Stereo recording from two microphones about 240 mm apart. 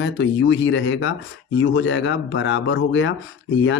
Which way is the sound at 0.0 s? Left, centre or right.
Left.